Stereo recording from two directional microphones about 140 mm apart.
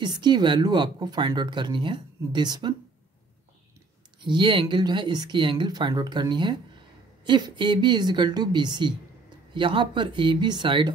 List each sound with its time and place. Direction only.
0.0 s speech: 30° right (ahead or behind)
4.2 s speech: 35° right (ahead or behind)